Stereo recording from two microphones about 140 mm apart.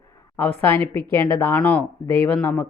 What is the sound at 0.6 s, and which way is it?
Speech, 15° left (ahead or behind).